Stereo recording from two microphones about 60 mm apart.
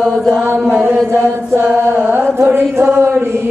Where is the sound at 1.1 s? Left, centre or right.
Right.